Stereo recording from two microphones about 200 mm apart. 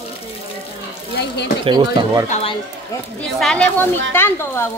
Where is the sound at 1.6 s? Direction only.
25° right (ahead or behind).